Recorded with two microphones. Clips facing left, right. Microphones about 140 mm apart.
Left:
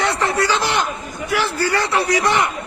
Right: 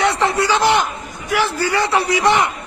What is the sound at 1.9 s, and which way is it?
Speech, 25° right (ahead or behind).